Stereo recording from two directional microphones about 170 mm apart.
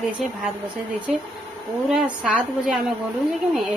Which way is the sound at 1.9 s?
10° right (ahead or behind).